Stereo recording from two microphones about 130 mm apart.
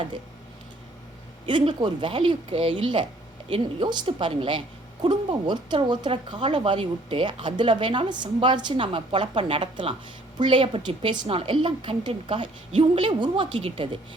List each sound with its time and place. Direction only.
1.5 s speech: 40° right (ahead or behind)